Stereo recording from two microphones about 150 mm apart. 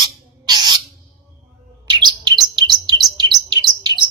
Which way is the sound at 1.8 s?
30° right (ahead or behind).